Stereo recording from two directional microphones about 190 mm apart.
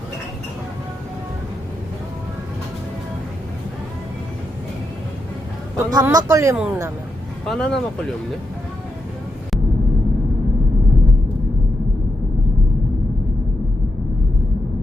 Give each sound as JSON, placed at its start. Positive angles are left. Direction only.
{"t": 5.7, "sound": "speech", "side_deg": -20}
{"t": 7.4, "sound": "speech", "side_deg": 0}